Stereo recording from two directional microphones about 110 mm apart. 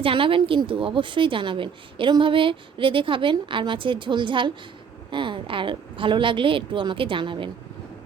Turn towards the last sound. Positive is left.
turn(degrees=-50)  # may be behind; listen again after turning